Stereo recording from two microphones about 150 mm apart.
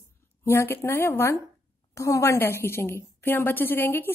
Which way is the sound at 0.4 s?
20° left (ahead or behind).